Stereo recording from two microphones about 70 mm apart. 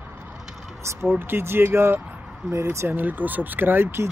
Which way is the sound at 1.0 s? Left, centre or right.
Right.